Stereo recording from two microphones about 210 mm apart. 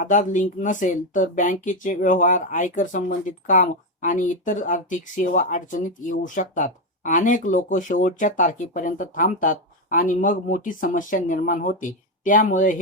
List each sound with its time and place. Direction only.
0.0 s speech: 35° left (ahead or behind)